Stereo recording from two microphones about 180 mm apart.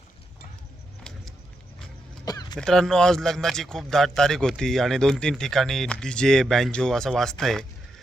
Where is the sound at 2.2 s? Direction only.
20° left (ahead or behind).